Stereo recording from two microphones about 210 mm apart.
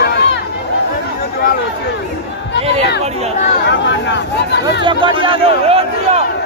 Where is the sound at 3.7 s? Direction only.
55° left (ahead or behind).